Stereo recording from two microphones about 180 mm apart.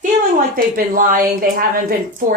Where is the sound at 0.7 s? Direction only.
50° right (ahead or behind).